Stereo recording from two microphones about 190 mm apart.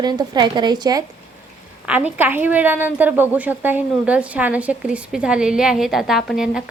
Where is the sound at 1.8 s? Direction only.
10° right (ahead or behind).